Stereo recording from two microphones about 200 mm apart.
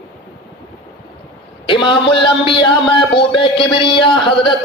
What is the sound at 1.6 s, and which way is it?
A man's voice, 25° left (ahead or behind).